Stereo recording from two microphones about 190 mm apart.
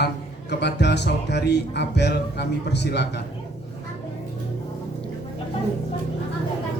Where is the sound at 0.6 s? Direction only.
65° left (ahead or behind).